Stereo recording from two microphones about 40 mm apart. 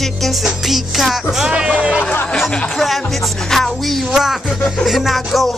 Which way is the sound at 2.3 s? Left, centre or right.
Centre.